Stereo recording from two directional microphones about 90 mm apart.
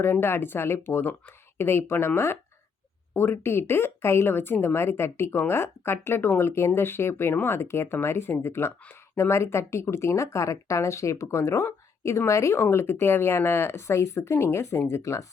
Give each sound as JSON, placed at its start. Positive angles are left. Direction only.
{"t": 0.0, "sound": "speech", "side_deg": 25}